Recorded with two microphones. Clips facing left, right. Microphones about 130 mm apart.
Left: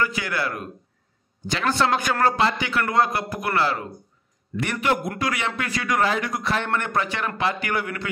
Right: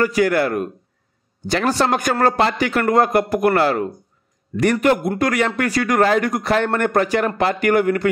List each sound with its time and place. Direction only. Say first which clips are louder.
0.0 s a man's voice: right 9 dB; 45° right (ahead or behind)